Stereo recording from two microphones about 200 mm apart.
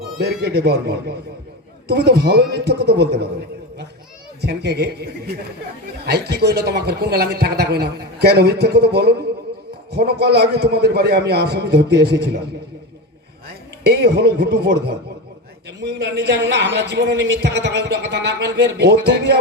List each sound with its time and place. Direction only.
0.2 s a woman's voice: 55° right (ahead or behind)
4.4 s a woman's voice: 55° right (ahead or behind)
13.5 s a woman's voice: 55° right (ahead or behind)